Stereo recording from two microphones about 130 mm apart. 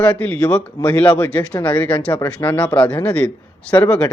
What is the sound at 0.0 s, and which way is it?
Speech, 10° left (ahead or behind).